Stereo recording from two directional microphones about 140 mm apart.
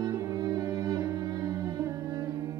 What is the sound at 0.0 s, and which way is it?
Music, 25° right (ahead or behind).